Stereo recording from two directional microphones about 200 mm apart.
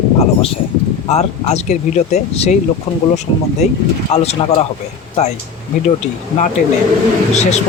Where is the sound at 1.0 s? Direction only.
35° left (ahead or behind).